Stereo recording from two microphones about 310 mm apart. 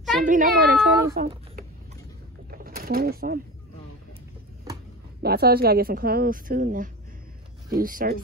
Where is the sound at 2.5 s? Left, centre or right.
Right.